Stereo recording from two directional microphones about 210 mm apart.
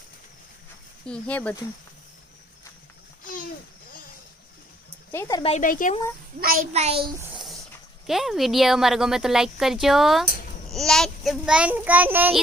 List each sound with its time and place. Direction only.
1.0 s speech: 5° left (ahead or behind)
5.4 s speech: 30° left (ahead or behind)
6.4 s a child's voice: 40° right (ahead or behind)
7.4 s a child's voice: centre (ahead or behind)